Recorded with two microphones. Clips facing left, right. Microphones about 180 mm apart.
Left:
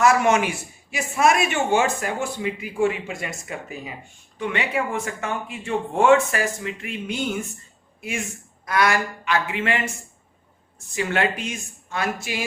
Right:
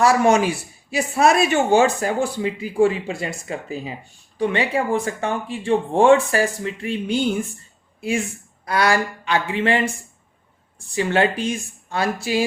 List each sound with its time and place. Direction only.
0.0 s a man's voice: 35° right (ahead or behind)
8.6 s a man's voice: 30° right (ahead or behind)
10.9 s a man's voice: 30° right (ahead or behind)